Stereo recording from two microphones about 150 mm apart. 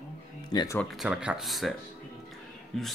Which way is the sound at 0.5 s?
25° left (ahead or behind).